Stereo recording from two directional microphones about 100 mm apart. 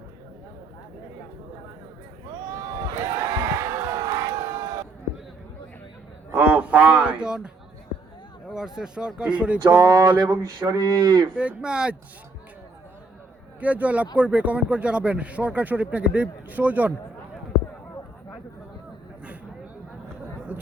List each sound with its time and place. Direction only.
2.6 s crowd: 40° right (ahead or behind)
6.3 s a sound: 15° right (ahead or behind)
8.4 s speech: 5° right (ahead or behind)
9.7 s speech: 35° right (ahead or behind)
11.3 s speech: 10° right (ahead or behind)
13.6 s speech: 15° right (ahead or behind)
20.5 s a sound: 15° right (ahead or behind)